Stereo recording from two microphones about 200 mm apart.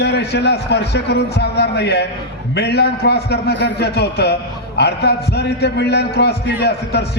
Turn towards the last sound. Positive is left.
turn(degrees=55)  # may be behind; listen again after turning